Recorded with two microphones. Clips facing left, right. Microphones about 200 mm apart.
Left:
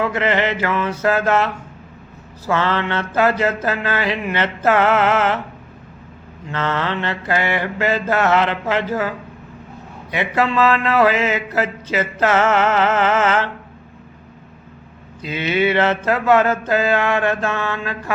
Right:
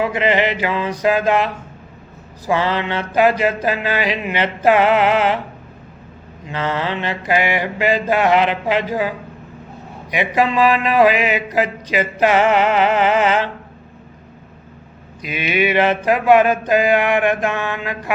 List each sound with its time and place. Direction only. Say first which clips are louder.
0.0 s mantra: right 2 dB; 15° right (ahead or behind)
2.5 s mantra: right 1 dB; 15° right (ahead or behind)
6.4 s mantra: even; 15° right (ahead or behind)
15.2 s mantra: left 1 dB; 15° right (ahead or behind)